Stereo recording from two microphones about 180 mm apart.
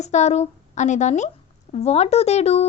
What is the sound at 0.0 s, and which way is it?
A woman's voice, 40° left (ahead or behind).